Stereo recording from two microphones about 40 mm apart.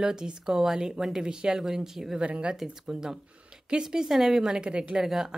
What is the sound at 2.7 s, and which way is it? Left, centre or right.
Speech, centre.